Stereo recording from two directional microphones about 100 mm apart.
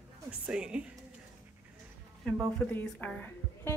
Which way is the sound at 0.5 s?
10° right (ahead or behind).